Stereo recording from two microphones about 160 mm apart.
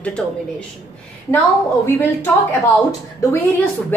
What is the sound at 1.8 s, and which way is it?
Speech, 15° left (ahead or behind).